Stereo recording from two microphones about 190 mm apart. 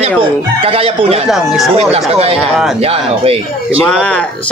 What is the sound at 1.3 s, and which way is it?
Speech, centre (ahead or behind).